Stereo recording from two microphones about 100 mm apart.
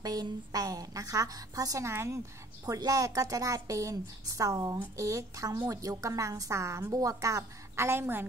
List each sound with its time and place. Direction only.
0.0 s a woman's voice: 40° right (ahead or behind); by 8.3 s 25° right (ahead or behind)